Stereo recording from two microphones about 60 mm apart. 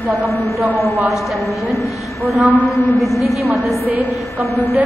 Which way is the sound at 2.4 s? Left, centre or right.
Right.